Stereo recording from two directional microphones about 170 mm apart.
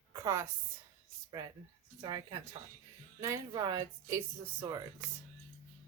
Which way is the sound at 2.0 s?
25° right (ahead or behind).